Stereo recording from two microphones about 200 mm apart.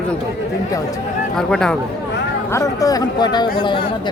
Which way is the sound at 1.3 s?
5° left (ahead or behind).